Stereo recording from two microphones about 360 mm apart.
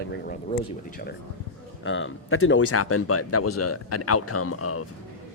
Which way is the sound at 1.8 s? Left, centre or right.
Left.